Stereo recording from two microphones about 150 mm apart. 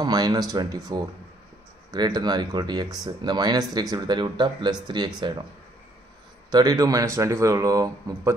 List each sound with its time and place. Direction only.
0.0 s speech: 25° right (ahead or behind)
6.5 s speech: 25° right (ahead or behind)